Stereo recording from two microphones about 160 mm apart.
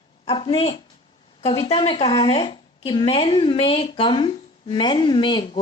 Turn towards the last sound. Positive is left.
turn(degrees=30)  # may be behind; listen again after turning